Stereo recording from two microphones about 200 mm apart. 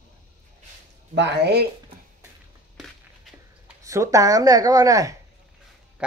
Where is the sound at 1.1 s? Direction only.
60° right (ahead or behind).